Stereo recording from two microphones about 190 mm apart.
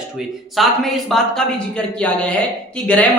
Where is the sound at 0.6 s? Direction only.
Centre (ahead or behind).